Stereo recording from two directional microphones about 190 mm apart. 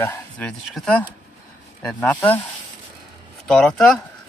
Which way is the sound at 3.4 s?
5° left (ahead or behind).